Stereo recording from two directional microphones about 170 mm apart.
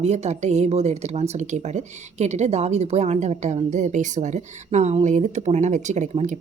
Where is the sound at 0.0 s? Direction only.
40° right (ahead or behind).